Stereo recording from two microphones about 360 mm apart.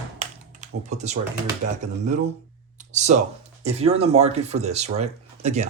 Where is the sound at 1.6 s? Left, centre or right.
Centre.